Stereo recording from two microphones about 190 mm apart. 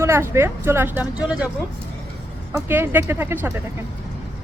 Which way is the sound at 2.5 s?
10° right (ahead or behind).